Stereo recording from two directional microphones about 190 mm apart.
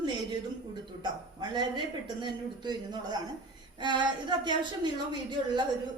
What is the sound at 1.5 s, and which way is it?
A woman's voice, 25° right (ahead or behind).